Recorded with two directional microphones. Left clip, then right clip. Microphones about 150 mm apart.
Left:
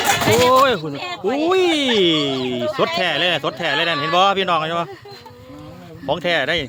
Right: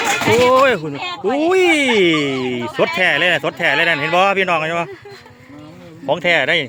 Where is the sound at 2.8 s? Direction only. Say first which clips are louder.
Right 5 dB; 10° right (ahead or behind).